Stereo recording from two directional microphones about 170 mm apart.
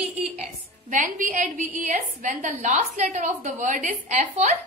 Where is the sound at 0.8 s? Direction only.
50° right (ahead or behind).